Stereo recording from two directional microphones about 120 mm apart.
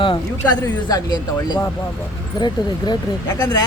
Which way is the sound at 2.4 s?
35° left (ahead or behind).